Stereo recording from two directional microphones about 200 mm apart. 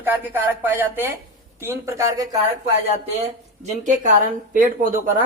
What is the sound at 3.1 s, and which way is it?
Speech, 35° right (ahead or behind).